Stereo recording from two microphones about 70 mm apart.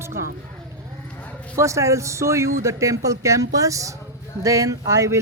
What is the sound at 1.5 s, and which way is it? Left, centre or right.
Speech, right.